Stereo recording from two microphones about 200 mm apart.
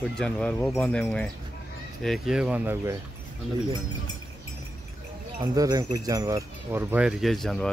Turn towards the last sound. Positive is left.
turn(degrees=5)  # may be behind; listen again after turning